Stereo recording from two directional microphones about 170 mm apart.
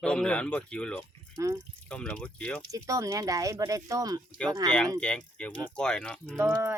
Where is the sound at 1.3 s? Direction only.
20° right (ahead or behind).